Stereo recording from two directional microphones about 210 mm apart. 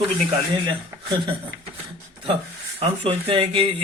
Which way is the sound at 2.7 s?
25° right (ahead or behind).